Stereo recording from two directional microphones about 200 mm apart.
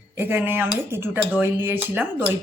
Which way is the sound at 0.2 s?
10° right (ahead or behind).